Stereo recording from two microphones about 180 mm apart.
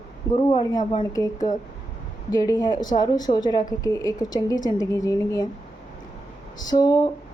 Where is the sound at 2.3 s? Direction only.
20° left (ahead or behind).